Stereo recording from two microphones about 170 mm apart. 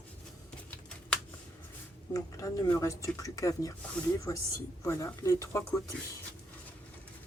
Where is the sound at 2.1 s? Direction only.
20° left (ahead or behind).